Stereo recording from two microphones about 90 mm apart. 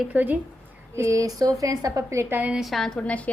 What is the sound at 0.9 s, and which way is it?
A woman's voice, 35° right (ahead or behind).